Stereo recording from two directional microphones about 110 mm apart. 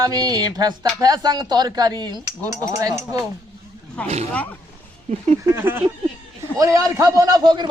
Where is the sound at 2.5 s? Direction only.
30° right (ahead or behind).